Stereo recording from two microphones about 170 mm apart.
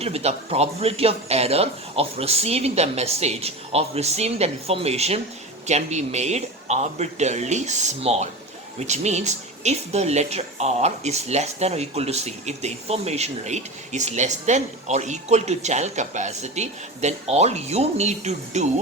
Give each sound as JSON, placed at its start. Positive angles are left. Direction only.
{"t": 0.0, "sound": "speech", "side_deg": -35}